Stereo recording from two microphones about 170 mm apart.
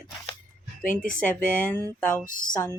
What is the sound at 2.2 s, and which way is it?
Speech, 50° left (ahead or behind).